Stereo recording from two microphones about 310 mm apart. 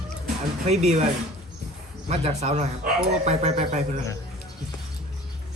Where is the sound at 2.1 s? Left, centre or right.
Centre.